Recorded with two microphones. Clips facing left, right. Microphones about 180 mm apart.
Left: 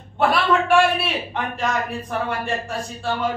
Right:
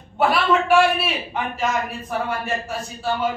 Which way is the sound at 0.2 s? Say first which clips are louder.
Even; centre (ahead or behind).